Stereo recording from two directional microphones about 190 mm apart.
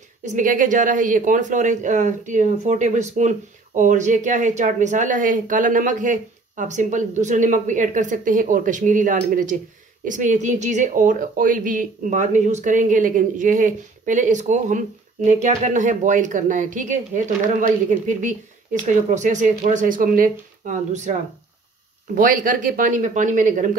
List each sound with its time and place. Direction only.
0.2 s speech: 40° right (ahead or behind)